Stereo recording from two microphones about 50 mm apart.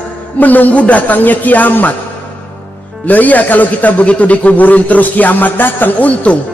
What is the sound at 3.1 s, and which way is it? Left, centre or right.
Speech, left.